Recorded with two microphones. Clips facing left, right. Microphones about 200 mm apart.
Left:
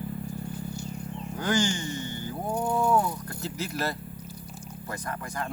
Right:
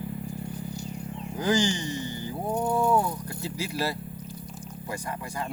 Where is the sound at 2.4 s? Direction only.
Centre (ahead or behind).